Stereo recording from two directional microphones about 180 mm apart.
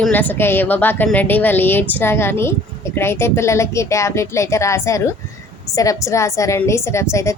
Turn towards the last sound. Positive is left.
turn(degrees=15)  # may be behind; listen again after turning